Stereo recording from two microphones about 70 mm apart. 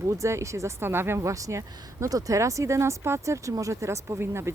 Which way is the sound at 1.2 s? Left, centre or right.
Right.